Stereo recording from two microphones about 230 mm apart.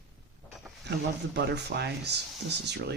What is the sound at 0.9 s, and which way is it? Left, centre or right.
Speech, right.